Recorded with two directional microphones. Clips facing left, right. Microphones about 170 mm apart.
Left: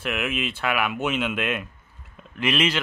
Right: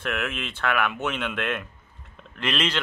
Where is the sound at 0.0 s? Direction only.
10° left (ahead or behind).